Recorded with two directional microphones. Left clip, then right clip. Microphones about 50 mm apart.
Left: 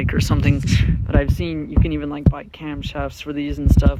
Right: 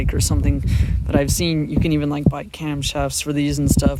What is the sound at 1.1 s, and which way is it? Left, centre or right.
Speech, right.